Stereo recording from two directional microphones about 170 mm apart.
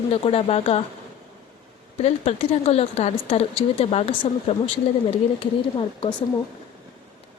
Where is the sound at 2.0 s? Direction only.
35° left (ahead or behind).